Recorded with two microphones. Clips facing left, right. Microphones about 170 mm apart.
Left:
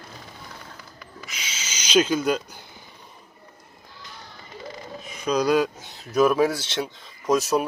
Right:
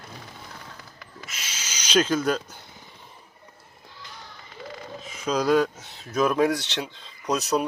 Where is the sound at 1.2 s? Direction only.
Centre (ahead or behind).